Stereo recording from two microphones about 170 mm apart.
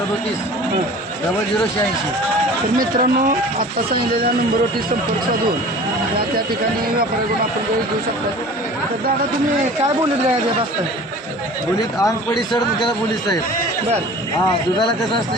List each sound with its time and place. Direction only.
2.7 s speech: 55° right (ahead or behind)